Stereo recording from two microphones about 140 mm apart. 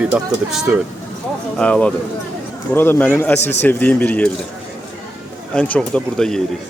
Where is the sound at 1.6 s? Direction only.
5° left (ahead or behind).